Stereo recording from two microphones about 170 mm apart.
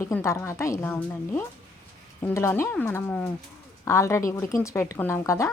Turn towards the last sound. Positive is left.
turn(degrees=20)  # may be behind; listen again after turning